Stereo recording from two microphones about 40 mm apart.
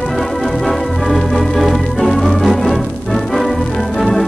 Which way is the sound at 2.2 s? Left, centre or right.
Centre.